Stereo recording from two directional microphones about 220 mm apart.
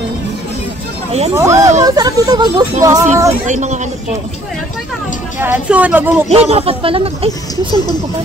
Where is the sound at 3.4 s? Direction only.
35° right (ahead or behind).